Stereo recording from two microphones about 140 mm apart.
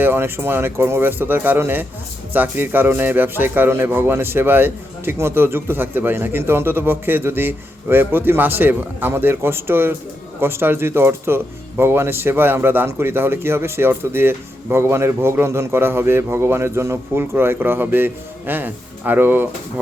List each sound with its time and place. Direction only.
0.0 s speech: 15° right (ahead or behind)